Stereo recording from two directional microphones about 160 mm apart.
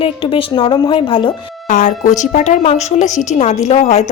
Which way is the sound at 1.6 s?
50° left (ahead or behind).